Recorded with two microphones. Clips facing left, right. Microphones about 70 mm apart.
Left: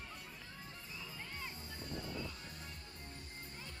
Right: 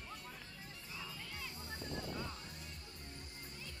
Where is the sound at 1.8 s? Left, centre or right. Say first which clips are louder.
Even; right.